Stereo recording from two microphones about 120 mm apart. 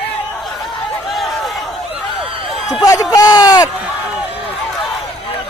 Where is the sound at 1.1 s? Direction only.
Centre (ahead or behind).